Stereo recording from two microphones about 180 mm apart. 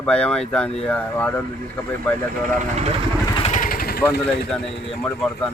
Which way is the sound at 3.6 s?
55° left (ahead or behind).